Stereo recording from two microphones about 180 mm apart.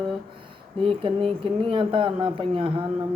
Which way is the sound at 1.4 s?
30° right (ahead or behind).